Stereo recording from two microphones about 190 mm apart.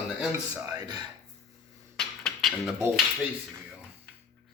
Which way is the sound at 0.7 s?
20° right (ahead or behind).